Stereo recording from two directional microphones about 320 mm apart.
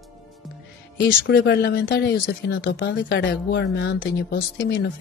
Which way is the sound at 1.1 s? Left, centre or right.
Left.